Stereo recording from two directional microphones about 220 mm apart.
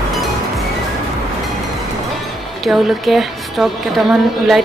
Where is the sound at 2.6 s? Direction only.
Centre (ahead or behind).